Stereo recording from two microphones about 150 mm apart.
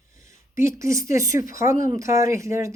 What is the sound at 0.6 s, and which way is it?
Speech, 20° right (ahead or behind).